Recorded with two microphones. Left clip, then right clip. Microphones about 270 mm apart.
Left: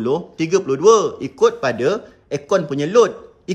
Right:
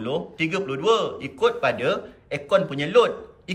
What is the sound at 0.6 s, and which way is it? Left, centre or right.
A man's voice, left.